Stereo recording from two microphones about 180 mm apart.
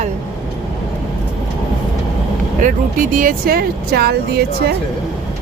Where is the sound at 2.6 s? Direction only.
45° right (ahead or behind); by 4.7 s 60° right (ahead or behind).